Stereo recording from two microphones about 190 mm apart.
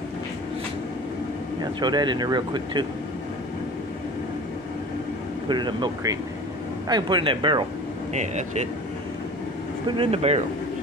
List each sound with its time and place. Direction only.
1.6 s speech: 20° right (ahead or behind)
5.5 s speech: 25° right (ahead or behind)
8.1 s speech: 35° right (ahead or behind)
9.9 s speech: 30° right (ahead or behind)